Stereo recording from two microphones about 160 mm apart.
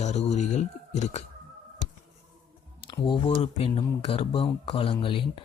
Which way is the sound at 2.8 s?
30° left (ahead or behind).